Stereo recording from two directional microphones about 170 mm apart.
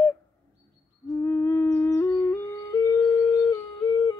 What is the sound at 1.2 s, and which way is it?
Music, 10° left (ahead or behind).